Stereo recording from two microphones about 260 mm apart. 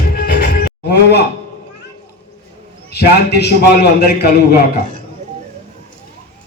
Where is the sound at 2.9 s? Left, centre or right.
Left.